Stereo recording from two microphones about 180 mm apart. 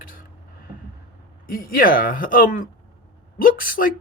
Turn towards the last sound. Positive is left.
turn(degrees=50)  # may be behind; listen again after turning